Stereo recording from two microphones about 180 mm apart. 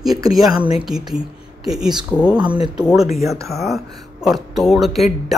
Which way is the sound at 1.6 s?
5° right (ahead or behind).